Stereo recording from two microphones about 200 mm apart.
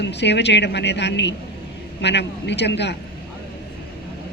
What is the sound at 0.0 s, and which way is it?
A woman's voice, 60° left (ahead or behind).